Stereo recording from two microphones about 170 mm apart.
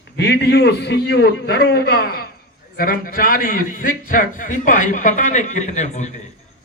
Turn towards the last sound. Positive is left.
turn(degrees=45)  # may be behind; listen again after turning